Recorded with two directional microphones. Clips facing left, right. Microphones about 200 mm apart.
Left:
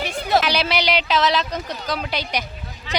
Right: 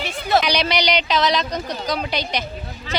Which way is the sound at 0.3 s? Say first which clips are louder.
Right 1 dB; 5° left (ahead or behind).